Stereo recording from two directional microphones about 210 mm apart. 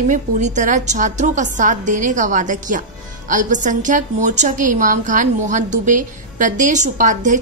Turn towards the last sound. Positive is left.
turn(degrees=-35)  # may be behind; listen again after turning